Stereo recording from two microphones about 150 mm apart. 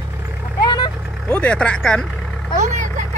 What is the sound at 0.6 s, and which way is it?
Vehicle, 30° left (ahead or behind).